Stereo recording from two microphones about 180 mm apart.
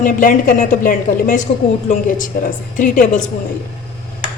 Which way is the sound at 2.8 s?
45° left (ahead or behind).